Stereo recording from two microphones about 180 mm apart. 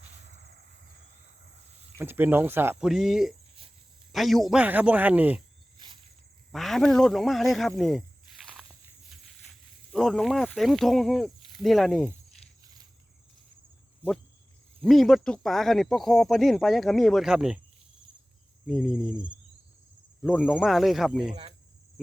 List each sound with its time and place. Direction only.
2.0 s speech: 10° right (ahead or behind)
5.7 s a sound: 25° right (ahead or behind)
6.5 s speech: centre (ahead or behind)
7.8 s snake: centre (ahead or behind)
9.9 s speech: centre (ahead or behind)
12.6 s insect: 20° right (ahead or behind)
14.8 s speech: centre (ahead or behind)
18.7 s speech: centre (ahead or behind)
20.2 s speech: 10° left (ahead or behind)
20.5 s speech: 5° right (ahead or behind)